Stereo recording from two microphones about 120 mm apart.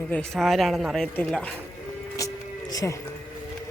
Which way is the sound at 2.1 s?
30° left (ahead or behind).